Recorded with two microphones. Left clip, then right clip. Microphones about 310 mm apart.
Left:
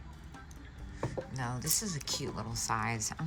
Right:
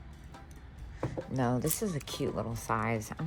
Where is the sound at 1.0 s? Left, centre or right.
Centre.